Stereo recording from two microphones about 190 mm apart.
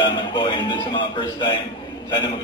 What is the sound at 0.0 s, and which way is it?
A man's voice, 25° left (ahead or behind).